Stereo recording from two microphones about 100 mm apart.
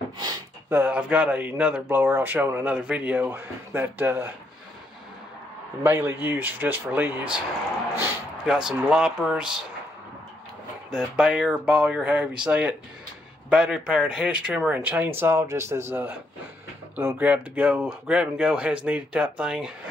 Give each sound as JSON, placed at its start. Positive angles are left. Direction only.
{"t": 0.7, "sound": "speech", "side_deg": -20}
{"t": 1.9, "sound": "speech", "side_deg": -25}
{"t": 5.9, "sound": "speech", "side_deg": -20}
{"t": 8.5, "sound": "speech", "side_deg": -5}
{"t": 11.1, "sound": "speech", "side_deg": -5}
{"t": 17.2, "sound": "speech", "side_deg": -15}